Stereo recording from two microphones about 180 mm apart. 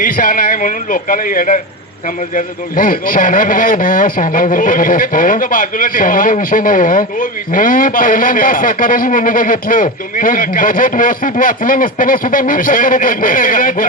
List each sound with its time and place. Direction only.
0.0 s a man's voice: 50° left (ahead or behind)